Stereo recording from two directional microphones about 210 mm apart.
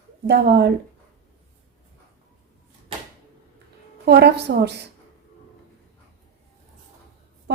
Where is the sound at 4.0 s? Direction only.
50° right (ahead or behind).